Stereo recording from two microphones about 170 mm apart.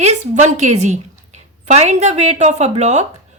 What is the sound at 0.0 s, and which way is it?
A woman's voice, 40° right (ahead or behind).